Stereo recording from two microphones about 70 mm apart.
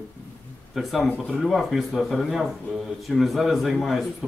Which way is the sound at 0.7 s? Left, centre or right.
Centre.